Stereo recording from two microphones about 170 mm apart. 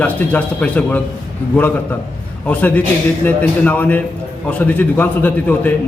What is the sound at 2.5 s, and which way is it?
A man's voice, 10° left (ahead or behind).